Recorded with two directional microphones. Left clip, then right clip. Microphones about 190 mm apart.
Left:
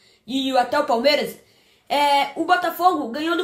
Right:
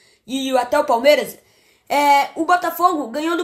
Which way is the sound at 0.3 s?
35° right (ahead or behind).